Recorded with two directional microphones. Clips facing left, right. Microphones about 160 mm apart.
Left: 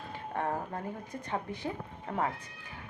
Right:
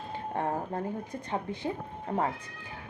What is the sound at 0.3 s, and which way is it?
Speech, 30° right (ahead or behind).